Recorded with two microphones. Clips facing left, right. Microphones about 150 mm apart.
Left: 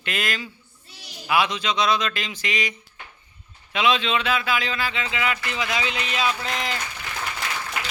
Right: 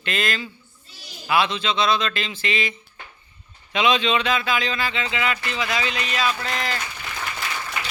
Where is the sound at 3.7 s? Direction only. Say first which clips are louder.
Right 2 dB; centre (ahead or behind); by 6.8 s 20° left (ahead or behind).